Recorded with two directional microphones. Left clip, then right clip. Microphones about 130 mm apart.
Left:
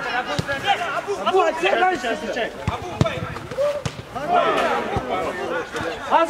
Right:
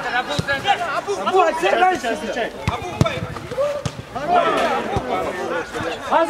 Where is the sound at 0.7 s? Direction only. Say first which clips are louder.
Right 1 dB; 15° right (ahead or behind).